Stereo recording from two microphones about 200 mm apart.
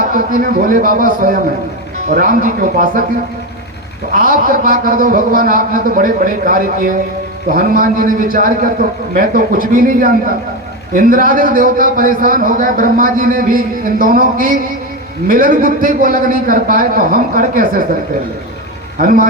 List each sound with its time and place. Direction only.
0.1 s a man's voice: 45° right (ahead or behind)
4.1 s a man's voice: 45° right (ahead or behind)
18.9 s a man's voice: 45° right (ahead or behind)